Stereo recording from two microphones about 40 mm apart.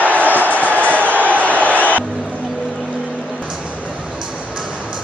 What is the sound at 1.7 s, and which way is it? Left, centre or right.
Music, left.